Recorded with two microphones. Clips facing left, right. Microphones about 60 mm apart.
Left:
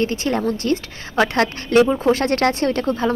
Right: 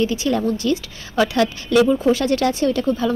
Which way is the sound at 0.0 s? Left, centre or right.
Left.